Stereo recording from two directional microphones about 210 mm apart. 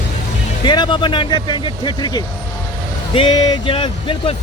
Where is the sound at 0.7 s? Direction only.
20° left (ahead or behind).